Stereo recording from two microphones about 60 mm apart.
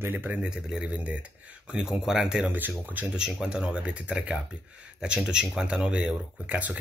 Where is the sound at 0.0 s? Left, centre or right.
Right.